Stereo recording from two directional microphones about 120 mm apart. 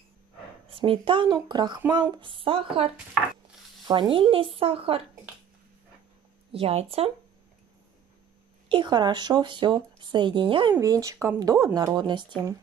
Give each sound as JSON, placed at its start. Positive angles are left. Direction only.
{"t": 0.7, "sound": "speech", "side_deg": -45}
{"t": 3.8, "sound": "speech", "side_deg": -40}
{"t": 6.5, "sound": "speech", "side_deg": -55}
{"t": 8.6, "sound": "speech", "side_deg": -40}
{"t": 10.8, "sound": "speech", "side_deg": -25}